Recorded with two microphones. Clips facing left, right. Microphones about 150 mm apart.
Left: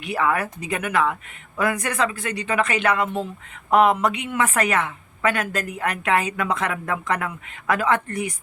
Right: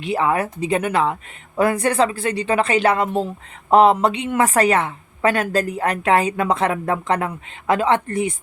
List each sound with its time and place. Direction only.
0.0 s a woman's voice: 25° right (ahead or behind)